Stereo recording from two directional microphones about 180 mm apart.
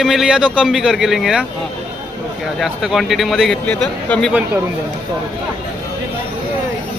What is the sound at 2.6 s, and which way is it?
Speech, centre (ahead or behind).